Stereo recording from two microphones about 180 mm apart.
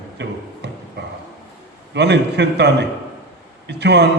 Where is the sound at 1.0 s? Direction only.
65° right (ahead or behind).